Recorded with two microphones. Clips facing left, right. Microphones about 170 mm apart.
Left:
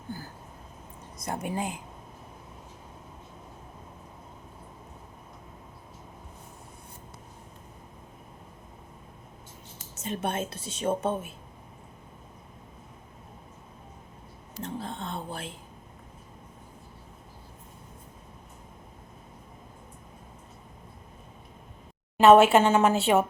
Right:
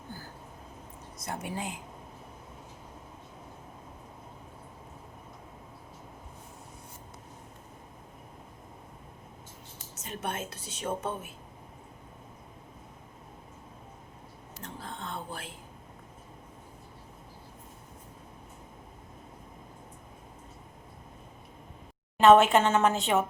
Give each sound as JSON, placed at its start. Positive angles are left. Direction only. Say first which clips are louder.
{"t": 1.2, "sound": "speech", "louder": "left 4 dB", "side_deg": 50}
{"t": 9.9, "sound": "a woman's voice", "louder": "left 5 dB", "side_deg": 25}
{"t": 14.6, "sound": "a woman's voice", "louder": "left 6 dB", "side_deg": 25}
{"t": 22.2, "sound": "speech", "louder": "left 3 dB", "side_deg": 10}